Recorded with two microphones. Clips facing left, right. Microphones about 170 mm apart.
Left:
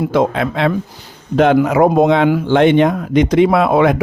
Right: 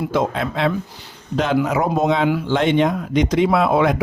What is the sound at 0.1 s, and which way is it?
Speech, 60° left (ahead or behind).